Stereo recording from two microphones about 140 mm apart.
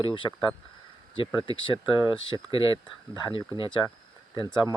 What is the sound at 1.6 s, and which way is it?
Speech, 35° left (ahead or behind).